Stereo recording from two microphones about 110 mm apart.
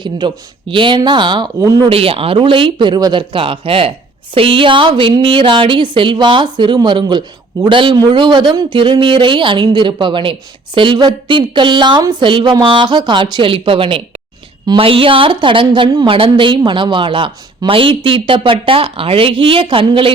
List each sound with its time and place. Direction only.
0.2 s a woman's voice: 45° right (ahead or behind)
1.5 s speech: 30° right (ahead or behind)
1.9 s a woman's voice: 60° right (ahead or behind)